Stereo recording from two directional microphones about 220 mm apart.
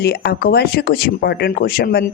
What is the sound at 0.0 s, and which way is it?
Speech, 45° left (ahead or behind).